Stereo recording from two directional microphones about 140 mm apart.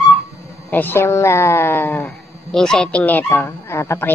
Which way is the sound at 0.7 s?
15° left (ahead or behind).